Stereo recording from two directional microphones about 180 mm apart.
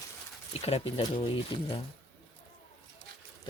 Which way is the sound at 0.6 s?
35° left (ahead or behind).